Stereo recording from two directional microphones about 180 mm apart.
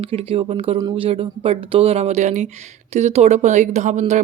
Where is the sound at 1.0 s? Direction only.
30° right (ahead or behind).